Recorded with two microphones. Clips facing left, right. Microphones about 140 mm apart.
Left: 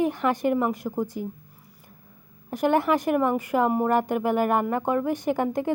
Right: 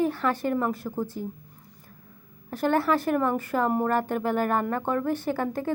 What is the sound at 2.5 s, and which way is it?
A woman's voice, 15° left (ahead or behind).